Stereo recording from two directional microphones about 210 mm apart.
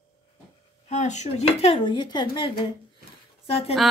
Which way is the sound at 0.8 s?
35° left (ahead or behind).